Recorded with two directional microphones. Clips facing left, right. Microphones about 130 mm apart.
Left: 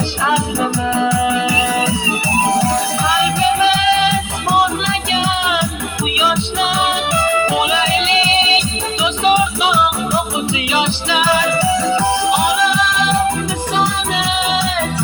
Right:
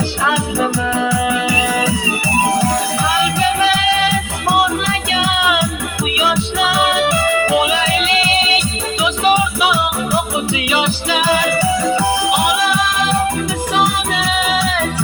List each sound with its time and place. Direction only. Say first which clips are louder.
0.9 s music: left 3 dB; 30° left (ahead or behind)
3.4 s music: left 3 dB; 25° left (ahead or behind)
5.1 s music: right 1 dB; 25° left (ahead or behind)
10.7 s music: even; 30° left (ahead or behind)
14.1 s music: even; 25° left (ahead or behind)